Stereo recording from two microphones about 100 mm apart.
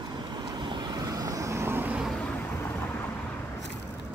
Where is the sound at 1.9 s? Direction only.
5° right (ahead or behind).